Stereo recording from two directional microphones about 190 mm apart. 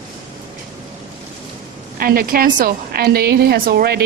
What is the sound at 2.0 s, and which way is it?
A woman's voice, 50° right (ahead or behind).